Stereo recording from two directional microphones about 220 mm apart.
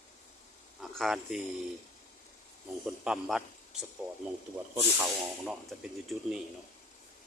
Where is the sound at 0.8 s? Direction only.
Centre (ahead or behind).